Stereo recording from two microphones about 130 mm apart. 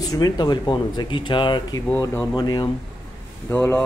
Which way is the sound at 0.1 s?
30° left (ahead or behind).